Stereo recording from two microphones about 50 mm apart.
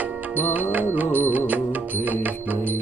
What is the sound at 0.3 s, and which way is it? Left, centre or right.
Music, right.